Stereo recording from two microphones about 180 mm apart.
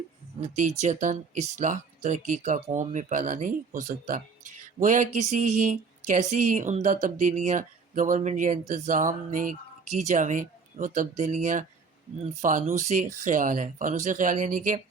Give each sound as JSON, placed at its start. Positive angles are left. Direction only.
{"t": 0.5, "sound": "speech", "side_deg": -40}